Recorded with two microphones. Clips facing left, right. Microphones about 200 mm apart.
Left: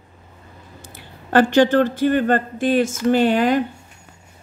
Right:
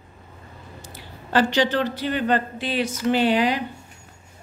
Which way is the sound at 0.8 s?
55° left (ahead or behind).